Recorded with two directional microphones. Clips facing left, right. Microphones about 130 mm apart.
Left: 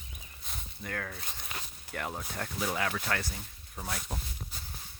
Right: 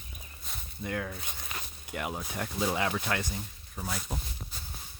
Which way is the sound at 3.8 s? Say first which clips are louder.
Right 2 dB; centre (ahead or behind).